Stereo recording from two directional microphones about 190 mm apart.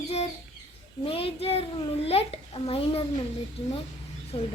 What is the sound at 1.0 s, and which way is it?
A child's voice, 30° left (ahead or behind).